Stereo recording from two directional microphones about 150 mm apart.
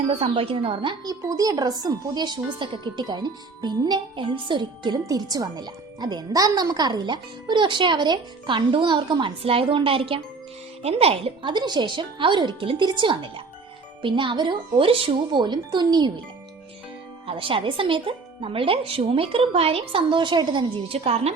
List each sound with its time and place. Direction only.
0.1 s speech: 40° right (ahead or behind)
1.3 s speech: 25° right (ahead or behind)
17.2 s speech: 35° right (ahead or behind)